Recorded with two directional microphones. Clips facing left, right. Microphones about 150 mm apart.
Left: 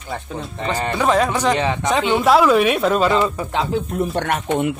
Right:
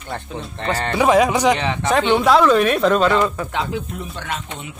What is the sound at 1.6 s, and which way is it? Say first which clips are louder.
Speech: left 2 dB; 20° left (ahead or behind).